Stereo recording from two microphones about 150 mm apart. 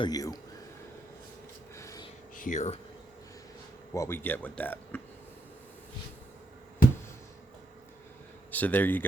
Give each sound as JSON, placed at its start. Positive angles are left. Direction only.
{"t": 0.0, "sound": "speech", "side_deg": 25}
{"t": 1.7, "sound": "a sound", "side_deg": 20}
{"t": 2.3, "sound": "speech", "side_deg": 60}
{"t": 3.9, "sound": "speech", "side_deg": 20}
{"t": 8.4, "sound": "speech", "side_deg": 10}